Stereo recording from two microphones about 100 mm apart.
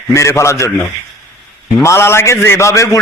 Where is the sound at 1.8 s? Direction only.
25° left (ahead or behind).